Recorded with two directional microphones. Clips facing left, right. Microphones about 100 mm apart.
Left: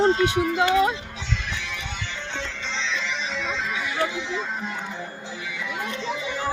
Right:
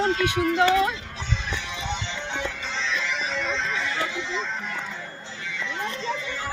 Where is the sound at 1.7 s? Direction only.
20° right (ahead or behind); by 6.2 s 5° left (ahead or behind).